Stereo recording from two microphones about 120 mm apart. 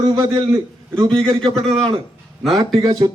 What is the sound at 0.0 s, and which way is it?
Speech, 35° right (ahead or behind).